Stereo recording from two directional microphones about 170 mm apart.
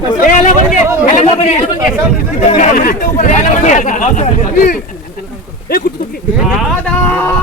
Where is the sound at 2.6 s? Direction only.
55° left (ahead or behind).